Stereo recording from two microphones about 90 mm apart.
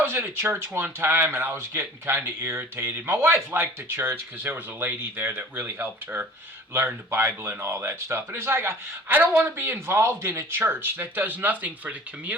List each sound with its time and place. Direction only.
0.0 s speech: 25° right (ahead or behind)